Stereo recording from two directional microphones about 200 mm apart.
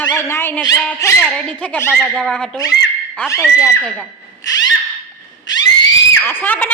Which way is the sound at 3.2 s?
15° left (ahead or behind).